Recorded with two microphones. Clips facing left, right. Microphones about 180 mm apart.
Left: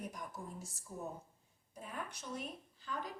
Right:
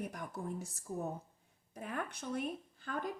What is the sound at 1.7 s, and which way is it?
Speech, 65° right (ahead or behind).